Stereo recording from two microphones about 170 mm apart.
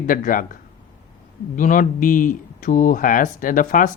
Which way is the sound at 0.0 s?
50° left (ahead or behind).